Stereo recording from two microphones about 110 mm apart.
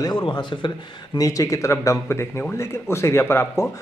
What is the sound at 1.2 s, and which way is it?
Speech, 30° left (ahead or behind).